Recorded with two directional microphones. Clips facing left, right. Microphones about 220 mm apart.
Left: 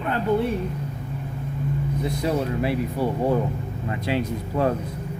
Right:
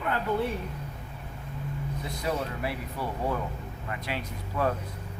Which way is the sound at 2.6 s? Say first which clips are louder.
Left 10 dB; 25° left (ahead or behind).